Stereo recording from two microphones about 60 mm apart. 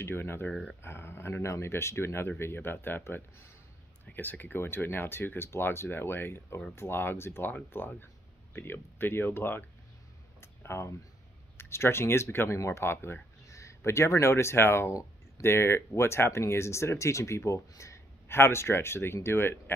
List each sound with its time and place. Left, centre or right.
0.0 s speech: left
0.5 s speech: centre
0.8 s speech: left
13.5 s speech: left